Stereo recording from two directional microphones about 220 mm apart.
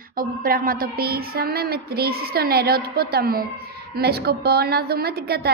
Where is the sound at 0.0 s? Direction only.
40° right (ahead or behind).